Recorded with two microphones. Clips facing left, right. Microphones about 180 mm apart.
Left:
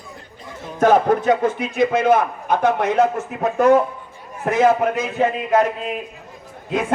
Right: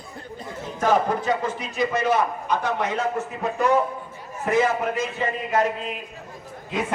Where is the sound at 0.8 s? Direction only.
55° left (ahead or behind).